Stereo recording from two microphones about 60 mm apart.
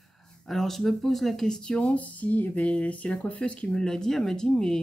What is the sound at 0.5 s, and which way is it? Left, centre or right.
Speech, centre.